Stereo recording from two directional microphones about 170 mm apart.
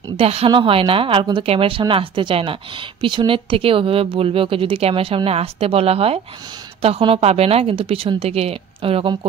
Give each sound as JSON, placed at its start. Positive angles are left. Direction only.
{"t": 0.2, "sound": "a woman's voice", "side_deg": -35}